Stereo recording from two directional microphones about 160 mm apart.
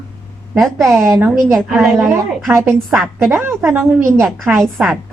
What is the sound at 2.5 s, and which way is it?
A woman's voice, 15° right (ahead or behind).